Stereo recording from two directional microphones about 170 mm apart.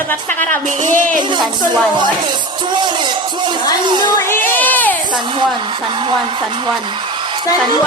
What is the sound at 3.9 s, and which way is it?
Music, 25° right (ahead or behind).